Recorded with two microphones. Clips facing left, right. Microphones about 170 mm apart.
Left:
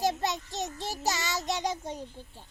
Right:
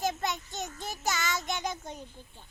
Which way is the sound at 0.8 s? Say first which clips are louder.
Even; 35° left (ahead or behind).